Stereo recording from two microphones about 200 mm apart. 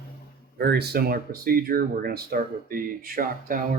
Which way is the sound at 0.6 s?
55° right (ahead or behind).